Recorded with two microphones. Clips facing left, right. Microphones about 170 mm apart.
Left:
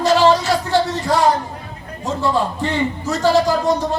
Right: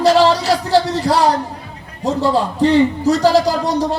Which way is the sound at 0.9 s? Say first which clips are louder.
Right 2 dB; 35° right (ahead or behind).